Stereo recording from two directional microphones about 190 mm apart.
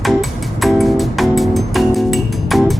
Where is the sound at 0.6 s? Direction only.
Centre (ahead or behind).